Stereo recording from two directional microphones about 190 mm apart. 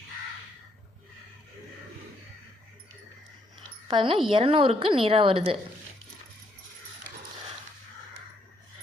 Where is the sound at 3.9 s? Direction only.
25° right (ahead or behind).